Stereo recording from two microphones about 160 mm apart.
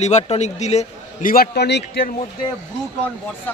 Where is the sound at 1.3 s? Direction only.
80° left.